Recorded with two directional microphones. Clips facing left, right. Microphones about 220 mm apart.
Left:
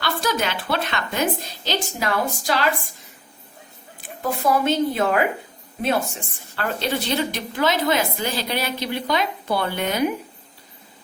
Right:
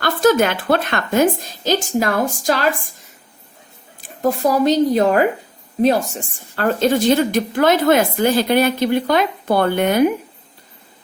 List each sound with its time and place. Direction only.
0.0 s a woman's voice: 50° right (ahead or behind)
4.2 s a woman's voice: 40° right (ahead or behind)